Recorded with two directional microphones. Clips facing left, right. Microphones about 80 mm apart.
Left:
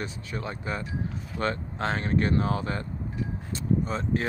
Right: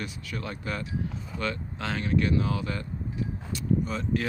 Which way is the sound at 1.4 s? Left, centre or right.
Left.